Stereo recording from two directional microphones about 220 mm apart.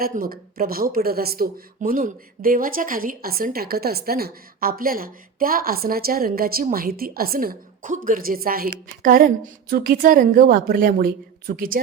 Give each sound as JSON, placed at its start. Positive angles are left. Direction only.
{"t": 0.0, "sound": "speech", "side_deg": -40}